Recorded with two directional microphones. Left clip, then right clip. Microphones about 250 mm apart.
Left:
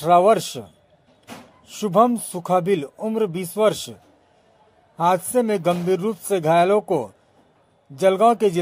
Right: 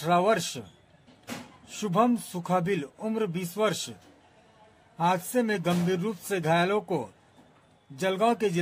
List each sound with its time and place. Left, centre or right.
0.0 s a man's voice: left
1.7 s a man's voice: left
4.9 s a man's voice: left